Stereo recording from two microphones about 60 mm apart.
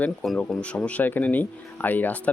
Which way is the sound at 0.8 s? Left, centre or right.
Left.